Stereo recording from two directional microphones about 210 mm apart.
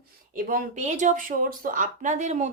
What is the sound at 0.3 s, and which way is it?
Speech, 40° right (ahead or behind).